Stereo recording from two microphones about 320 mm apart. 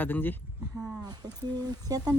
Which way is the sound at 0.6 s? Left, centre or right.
Centre.